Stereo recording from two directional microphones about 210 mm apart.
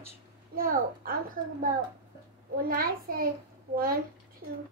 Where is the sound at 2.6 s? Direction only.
45° right (ahead or behind).